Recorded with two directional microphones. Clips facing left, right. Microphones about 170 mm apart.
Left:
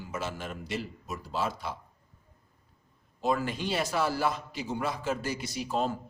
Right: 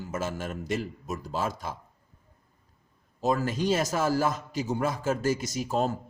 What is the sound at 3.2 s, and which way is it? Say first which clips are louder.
A man's voice: right 3 dB; 40° right (ahead or behind).